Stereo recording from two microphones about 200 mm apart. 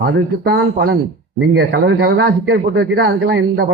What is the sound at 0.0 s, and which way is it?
A man's voice, 50° right (ahead or behind).